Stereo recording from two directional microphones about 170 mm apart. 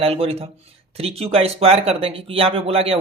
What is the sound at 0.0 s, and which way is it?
A man's voice, 35° right (ahead or behind).